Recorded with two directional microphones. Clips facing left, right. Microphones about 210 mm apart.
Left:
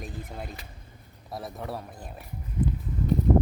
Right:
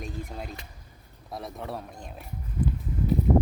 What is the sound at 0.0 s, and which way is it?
A man's voice, centre (ahead or behind).